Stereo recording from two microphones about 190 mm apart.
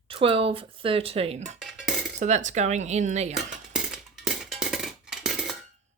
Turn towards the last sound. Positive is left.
turn(degrees=0)  # may be behind; listen again after turning